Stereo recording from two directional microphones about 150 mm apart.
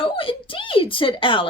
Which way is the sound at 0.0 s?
35° left (ahead or behind).